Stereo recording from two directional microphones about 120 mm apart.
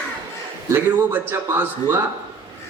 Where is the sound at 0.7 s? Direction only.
15° right (ahead or behind).